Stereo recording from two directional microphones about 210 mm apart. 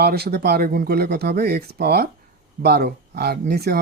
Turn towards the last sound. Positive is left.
turn(degrees=-50)  # may be behind; listen again after turning